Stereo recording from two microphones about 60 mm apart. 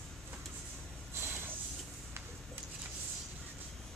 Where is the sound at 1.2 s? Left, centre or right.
Right.